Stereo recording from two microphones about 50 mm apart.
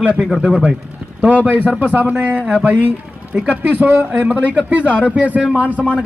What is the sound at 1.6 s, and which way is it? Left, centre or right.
Speech, right.